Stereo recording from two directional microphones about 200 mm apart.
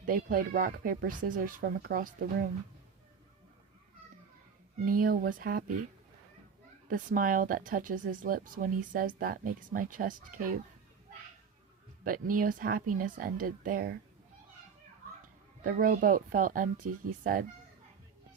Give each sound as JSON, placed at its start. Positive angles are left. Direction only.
{"t": 0.0, "sound": "speech", "side_deg": -45}
{"t": 4.9, "sound": "speech", "side_deg": -45}
{"t": 6.8, "sound": "speech", "side_deg": -40}
{"t": 12.0, "sound": "speech", "side_deg": -45}
{"t": 15.6, "sound": "speech", "side_deg": -45}